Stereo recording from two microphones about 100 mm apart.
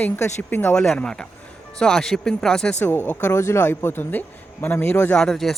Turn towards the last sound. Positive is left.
turn(degrees=5)  # may be behind; listen again after turning